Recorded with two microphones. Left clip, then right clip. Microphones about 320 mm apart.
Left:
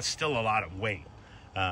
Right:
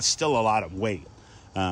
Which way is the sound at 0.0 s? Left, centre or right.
Centre.